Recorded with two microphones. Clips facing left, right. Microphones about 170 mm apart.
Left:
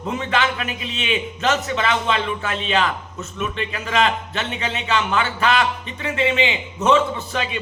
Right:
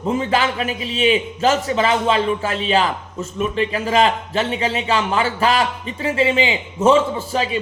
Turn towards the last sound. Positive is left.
turn(degrees=-30)  # may be behind; listen again after turning